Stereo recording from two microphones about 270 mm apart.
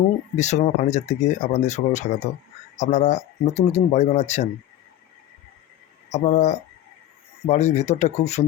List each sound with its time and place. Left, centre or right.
0.3 s speech: left
6.1 s speech: left